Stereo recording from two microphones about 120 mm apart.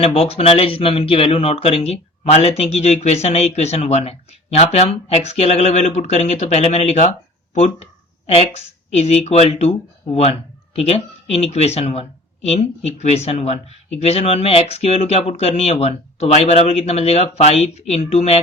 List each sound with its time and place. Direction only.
0.0 s speech: 60° left (ahead or behind)
11.3 s speech: 60° left (ahead or behind)